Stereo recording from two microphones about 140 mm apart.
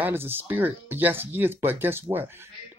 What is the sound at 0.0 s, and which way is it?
Speech, 15° right (ahead or behind).